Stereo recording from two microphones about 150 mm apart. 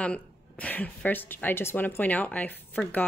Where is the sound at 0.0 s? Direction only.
10° left (ahead or behind).